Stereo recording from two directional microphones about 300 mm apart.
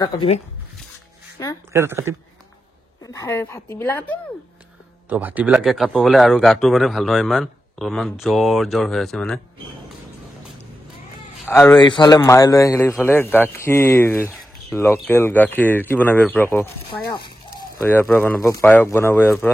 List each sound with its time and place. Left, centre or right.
0.0 s a man's voice: centre
1.7 s a woman's voice: centre
3.0 s a man's voice: centre
5.1 s speech: centre
11.4 s a man's voice: centre